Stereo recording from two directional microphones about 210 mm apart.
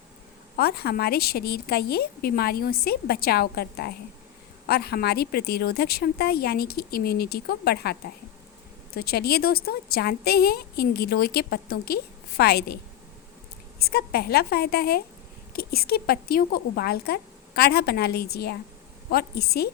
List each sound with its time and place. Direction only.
0.5 s a woman's voice: 50° left (ahead or behind)